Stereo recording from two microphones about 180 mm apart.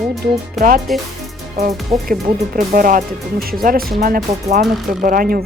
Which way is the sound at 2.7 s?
50° right (ahead or behind).